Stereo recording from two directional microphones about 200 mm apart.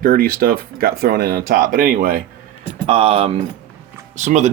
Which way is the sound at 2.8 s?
30° right (ahead or behind).